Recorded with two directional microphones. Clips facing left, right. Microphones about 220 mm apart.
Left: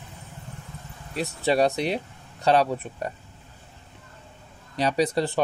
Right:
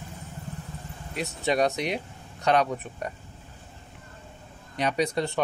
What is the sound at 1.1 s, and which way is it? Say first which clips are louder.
Speech: left 3 dB; 35° left (ahead or behind).